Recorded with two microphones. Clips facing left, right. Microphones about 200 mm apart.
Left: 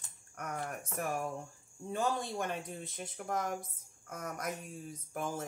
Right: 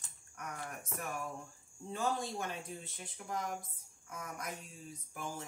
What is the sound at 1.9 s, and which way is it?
Speech, 55° left (ahead or behind).